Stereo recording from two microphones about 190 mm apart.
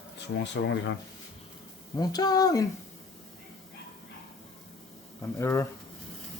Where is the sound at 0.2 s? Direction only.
70° left (ahead or behind).